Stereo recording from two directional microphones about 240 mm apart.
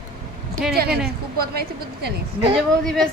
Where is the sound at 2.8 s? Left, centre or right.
Centre.